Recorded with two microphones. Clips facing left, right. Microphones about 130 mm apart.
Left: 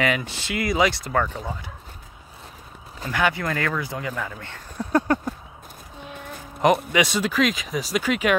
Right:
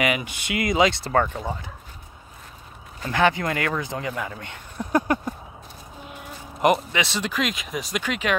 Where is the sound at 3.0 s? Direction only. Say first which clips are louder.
Right 2 dB; 30° right (ahead or behind).